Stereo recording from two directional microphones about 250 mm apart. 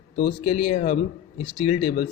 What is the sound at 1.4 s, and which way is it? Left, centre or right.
Speech, left.